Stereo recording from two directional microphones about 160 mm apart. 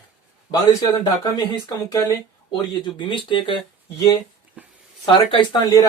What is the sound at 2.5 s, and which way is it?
Speech, 30° left (ahead or behind).